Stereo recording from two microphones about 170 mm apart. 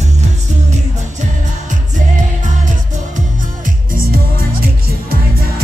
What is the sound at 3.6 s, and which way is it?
Music, 55° right (ahead or behind).